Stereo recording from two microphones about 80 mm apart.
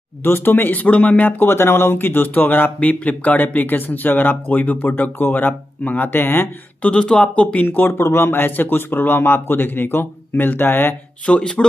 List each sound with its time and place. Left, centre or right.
0.2 s speech: left
6.9 s speech: centre
11.2 s speech: centre